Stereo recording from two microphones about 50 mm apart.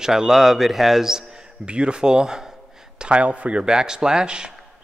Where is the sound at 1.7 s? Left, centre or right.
Right.